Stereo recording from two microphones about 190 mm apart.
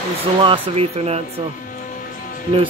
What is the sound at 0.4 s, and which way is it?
Speech, 30° right (ahead or behind).